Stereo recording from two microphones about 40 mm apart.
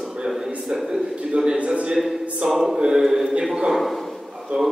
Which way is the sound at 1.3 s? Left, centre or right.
Right.